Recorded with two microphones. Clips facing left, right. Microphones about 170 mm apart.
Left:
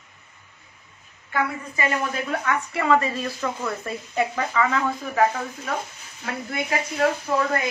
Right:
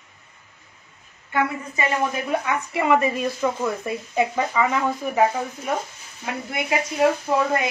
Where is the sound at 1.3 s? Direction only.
20° right (ahead or behind).